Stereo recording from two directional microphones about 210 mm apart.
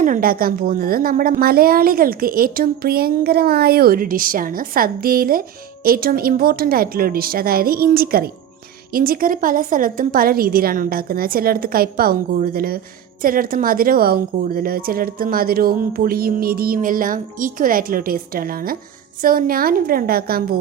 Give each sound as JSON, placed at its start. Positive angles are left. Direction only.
{"t": 0.0, "sound": "a woman's voice", "side_deg": -40}